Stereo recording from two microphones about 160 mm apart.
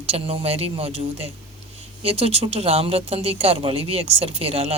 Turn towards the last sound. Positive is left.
turn(degrees=-35)  # may be behind; listen again after turning